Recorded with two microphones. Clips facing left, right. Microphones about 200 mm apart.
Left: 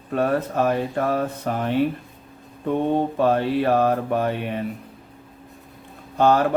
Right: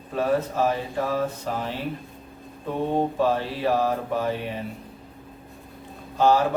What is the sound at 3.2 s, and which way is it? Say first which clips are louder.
Speech: left 4 dB; 55° left (ahead or behind).